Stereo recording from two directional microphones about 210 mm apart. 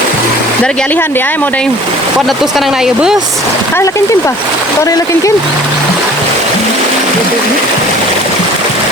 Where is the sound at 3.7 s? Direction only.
15° left (ahead or behind).